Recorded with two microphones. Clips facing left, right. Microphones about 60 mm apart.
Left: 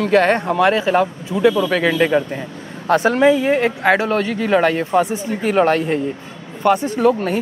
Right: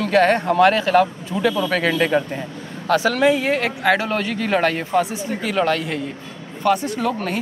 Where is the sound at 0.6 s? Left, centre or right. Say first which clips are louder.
Right 1 dB; centre.